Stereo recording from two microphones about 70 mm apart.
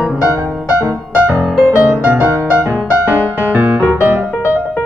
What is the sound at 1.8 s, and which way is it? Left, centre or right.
Music, right.